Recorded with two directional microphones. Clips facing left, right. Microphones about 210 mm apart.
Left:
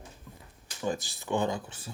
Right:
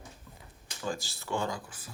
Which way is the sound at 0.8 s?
20° left (ahead or behind).